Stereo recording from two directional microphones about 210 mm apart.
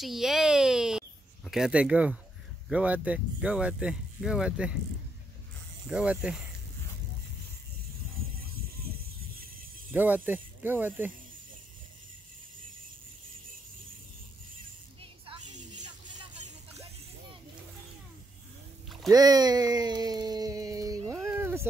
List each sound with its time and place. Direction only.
0.0 s a sound: centre (ahead or behind)
2.7 s speech: 5° right (ahead or behind)
5.9 s speech: 5° right (ahead or behind)
9.9 s speech: 10° right (ahead or behind)
15.0 s music: 30° right (ahead or behind)
19.0 s speech: 20° right (ahead or behind)
21.1 s a sound: 10° right (ahead or behind)